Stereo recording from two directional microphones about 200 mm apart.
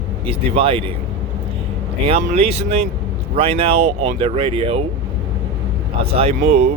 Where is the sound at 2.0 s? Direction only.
30° right (ahead or behind).